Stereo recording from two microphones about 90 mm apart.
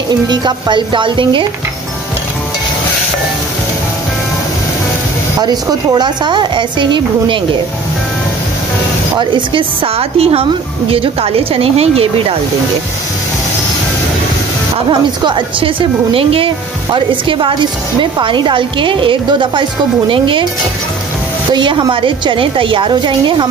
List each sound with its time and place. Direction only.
0.1 s a woman's voice: 55° right (ahead or behind)
5.4 s a woman's voice: 45° right (ahead or behind); by 7.3 s 60° right (ahead or behind)
9.2 s a woman's voice: 65° right (ahead or behind); by 12.4 s 90° right
14.9 s a woman's voice: 60° right (ahead or behind)
22.0 s a woman's voice: 70° right (ahead or behind)